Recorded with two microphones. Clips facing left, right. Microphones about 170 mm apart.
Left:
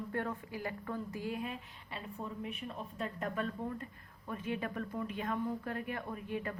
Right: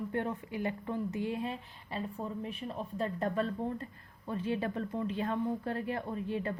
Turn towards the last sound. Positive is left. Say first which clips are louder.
# right 4 dB
turn(degrees=-30)  # may be behind; listen again after turning